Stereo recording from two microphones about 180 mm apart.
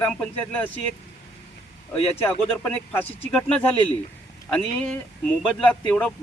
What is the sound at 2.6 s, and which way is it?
Speech, 10° left (ahead or behind).